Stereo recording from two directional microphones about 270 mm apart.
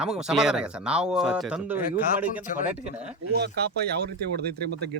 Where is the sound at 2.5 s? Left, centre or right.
Left.